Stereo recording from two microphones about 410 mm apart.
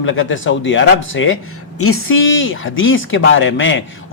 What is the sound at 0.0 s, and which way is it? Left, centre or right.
A man's voice, left.